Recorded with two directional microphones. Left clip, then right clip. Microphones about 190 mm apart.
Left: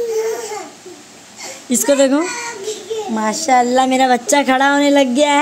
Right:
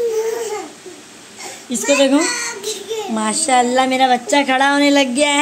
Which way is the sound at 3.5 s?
20° left (ahead or behind).